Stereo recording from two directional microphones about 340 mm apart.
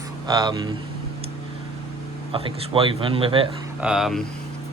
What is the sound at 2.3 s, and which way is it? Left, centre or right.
Speech, centre.